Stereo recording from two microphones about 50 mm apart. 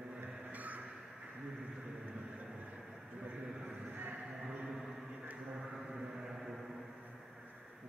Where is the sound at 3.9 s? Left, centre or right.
Right.